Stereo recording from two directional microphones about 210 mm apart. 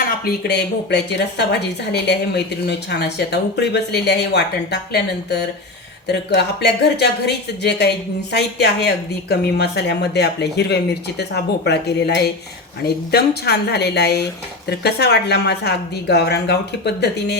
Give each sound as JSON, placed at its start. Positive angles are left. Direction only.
{"t": 0.4, "sound": "a woman's voice", "side_deg": 50}